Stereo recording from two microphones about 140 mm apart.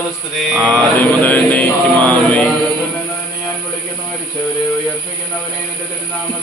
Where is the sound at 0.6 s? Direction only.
10° left (ahead or behind).